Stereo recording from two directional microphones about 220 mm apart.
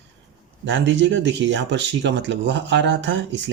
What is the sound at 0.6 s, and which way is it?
Speech, 55° right (ahead or behind).